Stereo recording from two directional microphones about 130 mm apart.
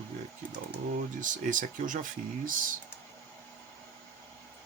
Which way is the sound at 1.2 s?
85° right.